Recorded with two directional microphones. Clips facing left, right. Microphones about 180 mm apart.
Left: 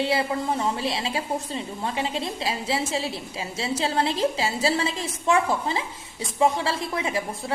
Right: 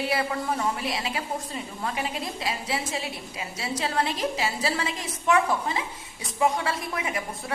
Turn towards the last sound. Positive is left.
turn(degrees=30)  # may be behind; listen again after turning